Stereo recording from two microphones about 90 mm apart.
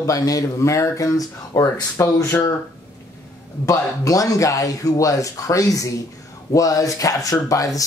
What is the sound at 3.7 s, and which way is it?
Speech, 40° left (ahead or behind).